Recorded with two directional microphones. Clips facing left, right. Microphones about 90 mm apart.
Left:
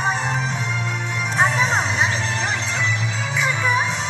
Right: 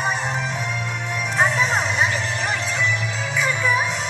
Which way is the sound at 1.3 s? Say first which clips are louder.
Left 1 dB; 30° left (ahead or behind).